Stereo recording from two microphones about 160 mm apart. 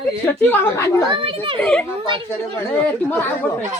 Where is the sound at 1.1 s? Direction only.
35° right (ahead or behind).